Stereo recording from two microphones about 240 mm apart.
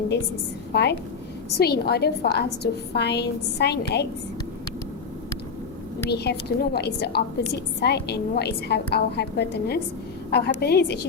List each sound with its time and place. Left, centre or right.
0.7 s a woman's voice: left
6.1 s a woman's voice: left